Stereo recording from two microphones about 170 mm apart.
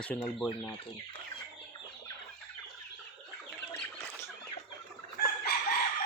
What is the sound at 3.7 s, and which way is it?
Bird, 10° left (ahead or behind).